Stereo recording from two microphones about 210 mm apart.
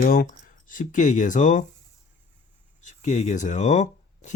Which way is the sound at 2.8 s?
35° left (ahead or behind).